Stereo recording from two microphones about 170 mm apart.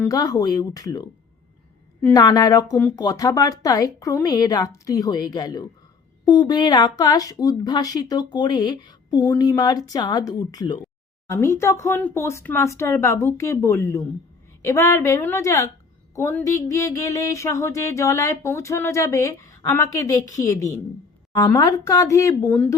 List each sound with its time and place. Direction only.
0.0 s music: 20° left (ahead or behind)
11.3 s speech: 15° left (ahead or behind)
16.1 s music: 15° left (ahead or behind)